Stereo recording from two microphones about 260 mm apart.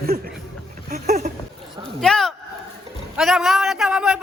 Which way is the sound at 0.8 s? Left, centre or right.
Right.